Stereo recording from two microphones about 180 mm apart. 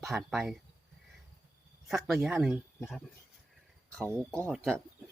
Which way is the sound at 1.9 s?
Centre (ahead or behind).